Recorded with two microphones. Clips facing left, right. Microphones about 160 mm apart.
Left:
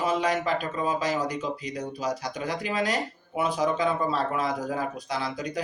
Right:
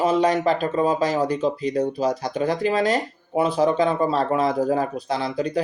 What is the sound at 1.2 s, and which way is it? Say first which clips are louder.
Speech: right 8 dB; 10° left (ahead or behind).